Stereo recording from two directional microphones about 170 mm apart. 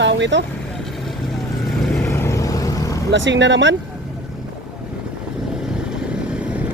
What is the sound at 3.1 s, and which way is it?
Speech, 90° right.